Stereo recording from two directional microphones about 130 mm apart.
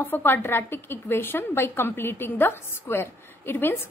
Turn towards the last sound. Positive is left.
turn(degrees=15)  # may be behind; listen again after turning